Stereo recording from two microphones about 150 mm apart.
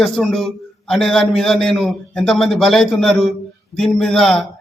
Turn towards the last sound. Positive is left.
turn(degrees=5)  # may be behind; listen again after turning